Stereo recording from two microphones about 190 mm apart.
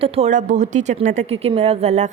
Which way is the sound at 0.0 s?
30° right (ahead or behind).